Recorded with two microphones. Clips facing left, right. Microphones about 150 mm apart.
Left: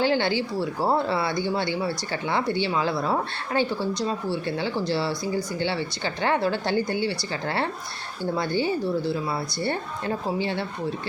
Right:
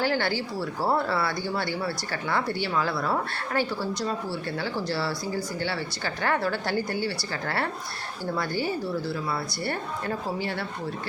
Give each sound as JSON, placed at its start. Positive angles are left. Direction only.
{"t": 0.0, "sound": "speech", "side_deg": 20}